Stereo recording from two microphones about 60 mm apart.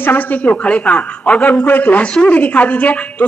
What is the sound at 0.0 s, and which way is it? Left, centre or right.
A woman's voice, left.